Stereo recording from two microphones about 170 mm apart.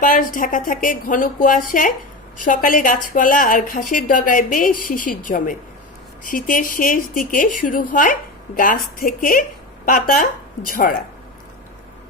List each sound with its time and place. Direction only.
0.0 s a woman's voice: 50° left (ahead or behind)